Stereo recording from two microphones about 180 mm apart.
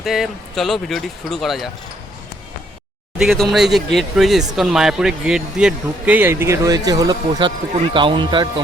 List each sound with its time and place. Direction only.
0.0 s speech: centre (ahead or behind)
3.2 s speech: centre (ahead or behind); by 8.6 s 25° right (ahead or behind)